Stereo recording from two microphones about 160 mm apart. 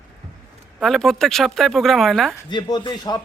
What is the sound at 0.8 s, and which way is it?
Speech, centre (ahead or behind).